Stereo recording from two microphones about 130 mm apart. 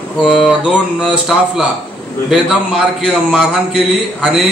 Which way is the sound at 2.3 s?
5° right (ahead or behind).